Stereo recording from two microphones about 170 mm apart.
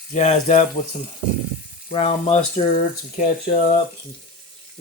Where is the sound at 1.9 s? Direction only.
35° left (ahead or behind).